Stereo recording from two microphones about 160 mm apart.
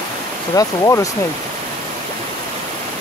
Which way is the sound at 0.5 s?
20° left (ahead or behind).